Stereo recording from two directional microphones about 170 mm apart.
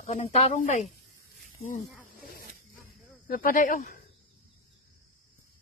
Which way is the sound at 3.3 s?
55° left (ahead or behind).